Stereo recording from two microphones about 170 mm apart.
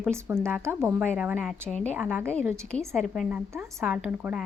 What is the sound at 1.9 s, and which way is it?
Speech, 10° right (ahead or behind).